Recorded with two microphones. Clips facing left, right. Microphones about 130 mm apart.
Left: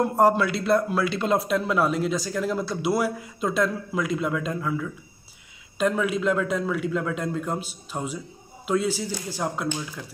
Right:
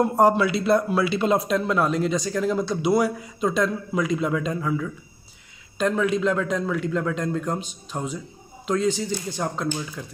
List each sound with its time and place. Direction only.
0.0 s speech: centre (ahead or behind)